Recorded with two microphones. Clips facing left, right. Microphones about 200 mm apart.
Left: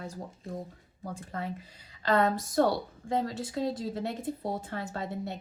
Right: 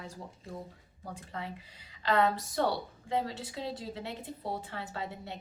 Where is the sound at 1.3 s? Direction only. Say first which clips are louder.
Left 4 dB; 45° left (ahead or behind).